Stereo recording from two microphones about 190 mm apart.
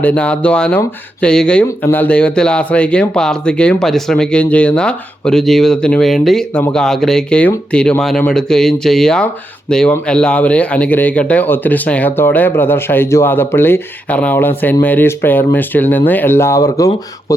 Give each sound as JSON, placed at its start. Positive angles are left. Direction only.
{"t": 0.0, "sound": "speech", "side_deg": 5}